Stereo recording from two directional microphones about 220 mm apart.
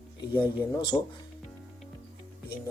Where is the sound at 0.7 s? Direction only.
20° left (ahead or behind).